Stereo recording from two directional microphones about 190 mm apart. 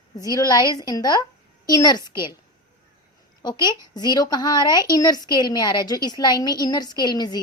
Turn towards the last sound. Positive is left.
turn(degrees=20)  # may be behind; listen again after turning